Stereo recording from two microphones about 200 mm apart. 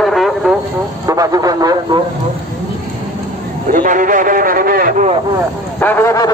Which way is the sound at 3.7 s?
40° right (ahead or behind).